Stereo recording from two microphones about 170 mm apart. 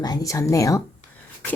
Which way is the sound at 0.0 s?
20° left (ahead or behind).